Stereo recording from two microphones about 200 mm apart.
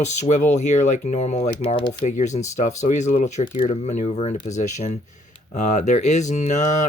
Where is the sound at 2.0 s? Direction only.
35° left (ahead or behind).